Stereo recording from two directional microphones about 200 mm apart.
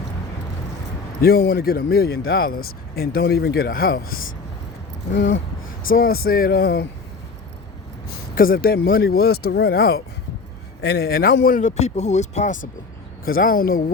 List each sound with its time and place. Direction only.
1.2 s speech: 50° left (ahead or behind)
5.9 s speech: 45° left (ahead or behind)
8.4 s speech: 45° left (ahead or behind)
13.2 s speech: 45° left (ahead or behind)